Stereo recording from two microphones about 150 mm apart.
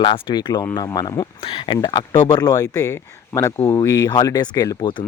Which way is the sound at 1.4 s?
35° left (ahead or behind).